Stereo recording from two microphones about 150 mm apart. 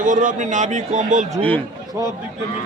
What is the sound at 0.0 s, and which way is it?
A man's voice, 60° right (ahead or behind).